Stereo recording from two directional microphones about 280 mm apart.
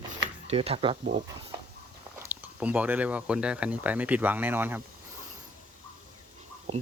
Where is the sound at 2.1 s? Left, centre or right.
Centre.